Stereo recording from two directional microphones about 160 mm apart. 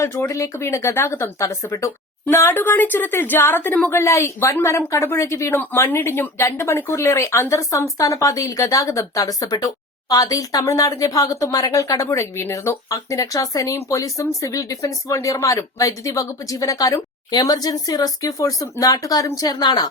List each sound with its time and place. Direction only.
0.0 s speech: 15° left (ahead or behind)